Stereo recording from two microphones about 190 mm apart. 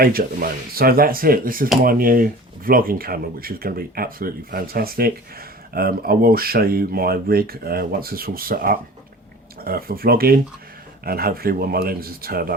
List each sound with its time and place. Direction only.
0.0 s speech: 50° right (ahead or behind)